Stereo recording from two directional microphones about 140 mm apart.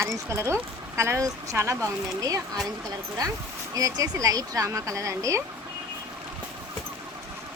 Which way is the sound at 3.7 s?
25° right (ahead or behind).